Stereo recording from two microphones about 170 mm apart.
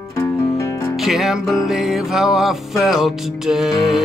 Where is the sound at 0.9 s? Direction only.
Centre (ahead or behind).